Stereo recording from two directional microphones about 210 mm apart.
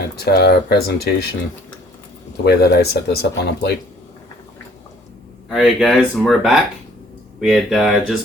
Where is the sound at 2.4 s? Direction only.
50° left (ahead or behind).